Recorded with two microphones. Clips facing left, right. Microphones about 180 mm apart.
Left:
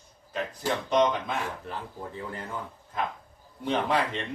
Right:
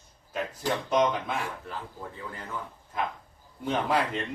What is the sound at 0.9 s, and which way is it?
Speech, 10° right (ahead or behind).